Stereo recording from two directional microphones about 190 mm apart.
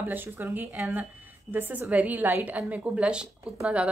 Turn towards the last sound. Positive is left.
turn(degrees=-5)  # may be behind; listen again after turning